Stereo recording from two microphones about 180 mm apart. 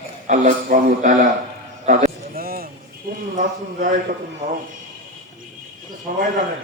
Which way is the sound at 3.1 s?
50° right (ahead or behind).